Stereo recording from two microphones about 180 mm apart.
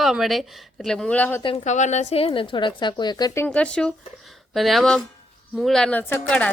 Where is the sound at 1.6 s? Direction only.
40° left (ahead or behind).